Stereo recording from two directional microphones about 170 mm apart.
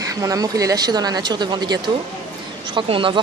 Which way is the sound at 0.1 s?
20° right (ahead or behind).